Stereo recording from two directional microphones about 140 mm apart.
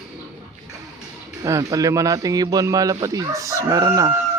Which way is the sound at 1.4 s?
25° right (ahead or behind).